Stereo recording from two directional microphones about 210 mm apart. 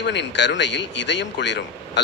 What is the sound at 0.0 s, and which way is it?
Speech, 55° left (ahead or behind).